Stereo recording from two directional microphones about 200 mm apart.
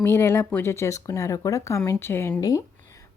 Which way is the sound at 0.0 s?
10° left (ahead or behind).